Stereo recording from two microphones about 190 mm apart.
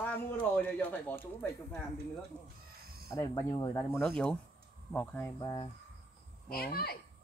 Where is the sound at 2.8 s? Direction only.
50° right (ahead or behind).